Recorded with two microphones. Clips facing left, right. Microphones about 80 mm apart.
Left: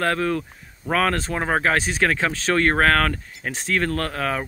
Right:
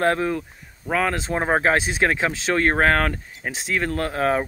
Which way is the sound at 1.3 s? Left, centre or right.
Right.